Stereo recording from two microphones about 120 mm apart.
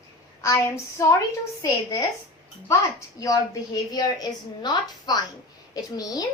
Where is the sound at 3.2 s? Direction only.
30° left (ahead or behind).